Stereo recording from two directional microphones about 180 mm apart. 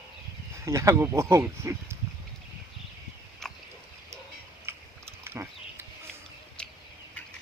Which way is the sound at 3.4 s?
Centre (ahead or behind).